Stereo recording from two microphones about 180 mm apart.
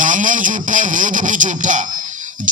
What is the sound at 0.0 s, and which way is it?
A man's voice, 45° right (ahead or behind).